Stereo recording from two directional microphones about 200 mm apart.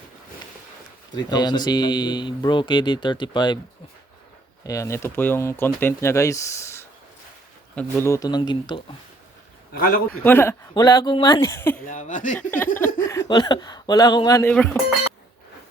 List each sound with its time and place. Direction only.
1.3 s speech: 20° left (ahead or behind)
4.6 s speech: 15° left (ahead or behind)
9.7 s a man's voice: 50° left (ahead or behind)
10.1 s speech: 10° left (ahead or behind)
11.8 s speech: 40° left (ahead or behind)
12.4 s speech: 10° left (ahead or behind)
14.5 s speech: 5° left (ahead or behind)